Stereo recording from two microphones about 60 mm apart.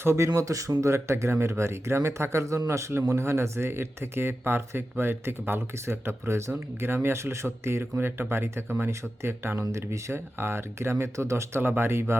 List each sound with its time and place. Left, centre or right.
0.0 s speech: right